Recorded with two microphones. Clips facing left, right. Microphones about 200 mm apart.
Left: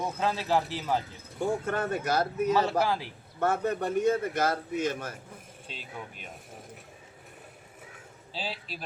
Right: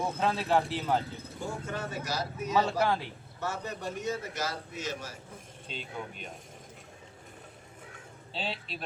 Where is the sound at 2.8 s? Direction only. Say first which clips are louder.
Even; centre (ahead or behind).